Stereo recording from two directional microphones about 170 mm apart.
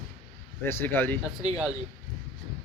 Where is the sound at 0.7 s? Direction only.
15° left (ahead or behind).